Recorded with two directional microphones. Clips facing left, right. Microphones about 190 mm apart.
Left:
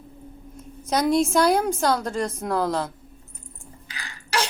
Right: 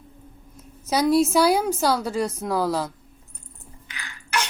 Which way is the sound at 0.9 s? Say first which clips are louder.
Right 2 dB; 5° right (ahead or behind).